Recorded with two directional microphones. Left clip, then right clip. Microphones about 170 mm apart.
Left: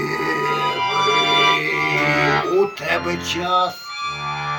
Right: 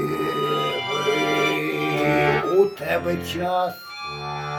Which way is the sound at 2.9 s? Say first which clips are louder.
Left 3 dB; 20° right (ahead or behind).